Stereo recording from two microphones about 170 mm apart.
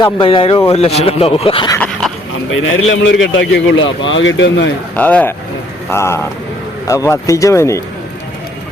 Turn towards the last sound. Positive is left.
turn(degrees=15)  # may be behind; listen again after turning